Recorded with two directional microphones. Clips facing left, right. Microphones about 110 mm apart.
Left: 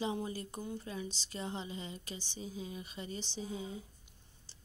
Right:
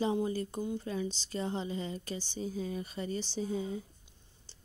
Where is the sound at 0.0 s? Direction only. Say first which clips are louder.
Right 6 dB; 30° right (ahead or behind).